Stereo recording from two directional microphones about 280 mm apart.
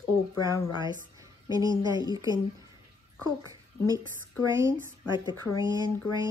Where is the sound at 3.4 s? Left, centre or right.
Centre.